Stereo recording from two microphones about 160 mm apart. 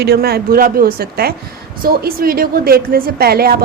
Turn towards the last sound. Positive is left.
turn(degrees=-75)  # may be behind; listen again after turning